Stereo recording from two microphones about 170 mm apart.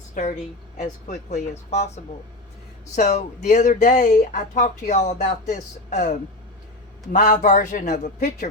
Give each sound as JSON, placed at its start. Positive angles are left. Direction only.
{"t": 0.1, "sound": "a woman's voice", "side_deg": 50}
{"t": 2.9, "sound": "speech", "side_deg": 45}